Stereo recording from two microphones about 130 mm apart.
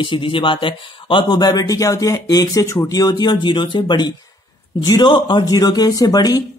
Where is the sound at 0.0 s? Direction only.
40° left (ahead or behind).